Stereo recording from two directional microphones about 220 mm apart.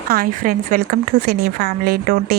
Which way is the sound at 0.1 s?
40° right (ahead or behind).